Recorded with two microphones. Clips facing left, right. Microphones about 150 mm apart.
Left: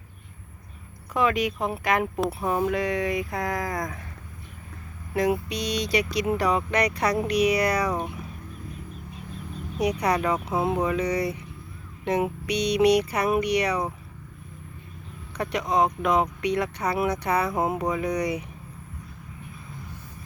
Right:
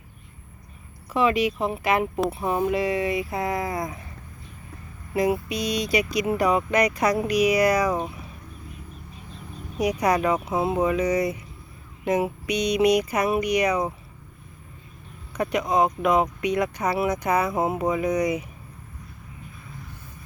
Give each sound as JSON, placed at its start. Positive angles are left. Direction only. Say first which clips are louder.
{"t": 1.1, "sound": "speech", "louder": "right 2 dB", "side_deg": -5}
{"t": 5.1, "sound": "speech", "louder": "right 1 dB", "side_deg": -5}
{"t": 10.0, "sound": "speech", "louder": "right 2 dB", "side_deg": -10}
{"t": 12.5, "sound": "music", "louder": "even", "side_deg": 35}
{"t": 13.1, "sound": "speech", "louder": "right 1 dB", "side_deg": -5}
{"t": 15.4, "sound": "speech", "louder": "right 2 dB", "side_deg": -10}